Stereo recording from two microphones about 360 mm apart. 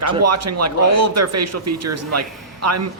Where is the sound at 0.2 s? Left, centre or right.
Right.